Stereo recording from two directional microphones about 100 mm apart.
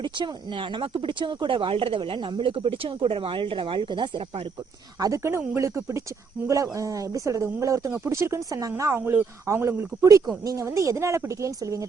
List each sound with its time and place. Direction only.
0.0 s speech: 55° right (ahead or behind)
4.9 s speech: 35° right (ahead or behind)